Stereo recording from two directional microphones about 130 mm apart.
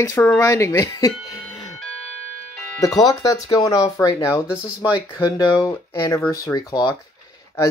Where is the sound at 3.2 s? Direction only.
30° left (ahead or behind).